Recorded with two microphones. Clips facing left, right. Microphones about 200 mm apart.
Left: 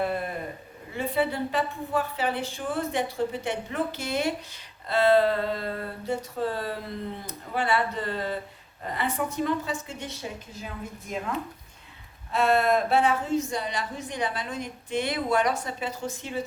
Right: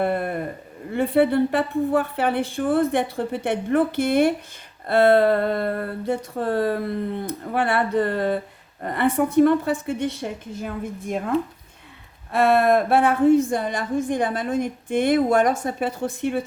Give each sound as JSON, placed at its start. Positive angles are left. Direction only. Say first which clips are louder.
{"t": 0.0, "sound": "a sound", "louder": "right 6 dB", "side_deg": -60}
{"t": 0.9, "sound": "a woman's voice", "louder": "right 8 dB", "side_deg": -60}
{"t": 12.3, "sound": "a woman's voice", "louder": "right 5 dB", "side_deg": -55}